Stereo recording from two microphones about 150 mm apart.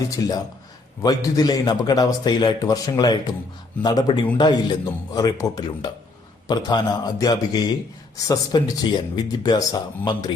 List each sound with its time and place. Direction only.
0.1 s a man's voice: 25° left (ahead or behind)